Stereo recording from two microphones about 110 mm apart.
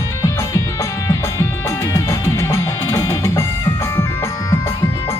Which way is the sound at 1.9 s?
25° left (ahead or behind).